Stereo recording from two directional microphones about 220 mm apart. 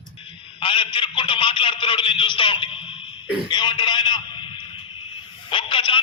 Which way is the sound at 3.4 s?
20° left (ahead or behind).